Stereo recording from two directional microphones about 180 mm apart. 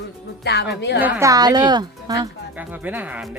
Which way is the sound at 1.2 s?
20° right (ahead or behind).